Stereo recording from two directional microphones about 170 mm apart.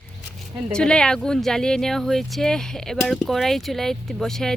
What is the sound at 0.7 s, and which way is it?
Speech, 5° left (ahead or behind).